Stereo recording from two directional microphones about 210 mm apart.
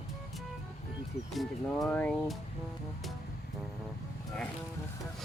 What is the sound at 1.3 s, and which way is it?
Speech, centre (ahead or behind).